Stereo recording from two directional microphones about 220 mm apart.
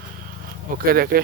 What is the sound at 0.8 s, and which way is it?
Speech, 45° right (ahead or behind).